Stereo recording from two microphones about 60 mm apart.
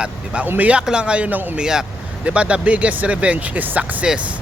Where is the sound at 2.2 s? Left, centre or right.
Right.